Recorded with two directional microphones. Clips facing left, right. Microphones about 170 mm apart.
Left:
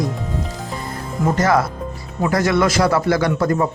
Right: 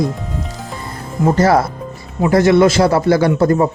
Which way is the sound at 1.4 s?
35° right (ahead or behind).